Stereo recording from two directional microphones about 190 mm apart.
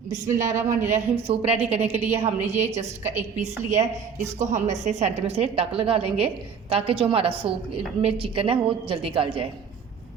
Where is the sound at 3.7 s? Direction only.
40° right (ahead or behind).